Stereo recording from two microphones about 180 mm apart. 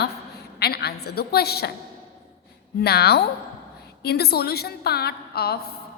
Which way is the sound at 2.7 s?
65° left (ahead or behind).